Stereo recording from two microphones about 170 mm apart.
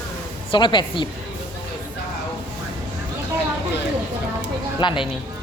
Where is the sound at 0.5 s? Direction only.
30° left (ahead or behind).